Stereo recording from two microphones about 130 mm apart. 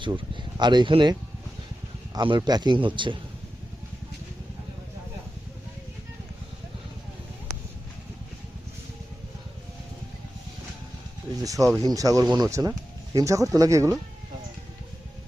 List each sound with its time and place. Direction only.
0.1 s speech: 35° right (ahead or behind)
2.1 s speech: 35° right (ahead or behind)
11.4 s speech: 25° right (ahead or behind)